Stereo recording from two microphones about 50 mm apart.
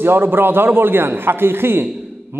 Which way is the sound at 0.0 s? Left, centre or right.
Right.